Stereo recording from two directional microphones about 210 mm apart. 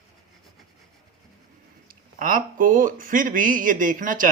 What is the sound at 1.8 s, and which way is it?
Speech, 40° right (ahead or behind).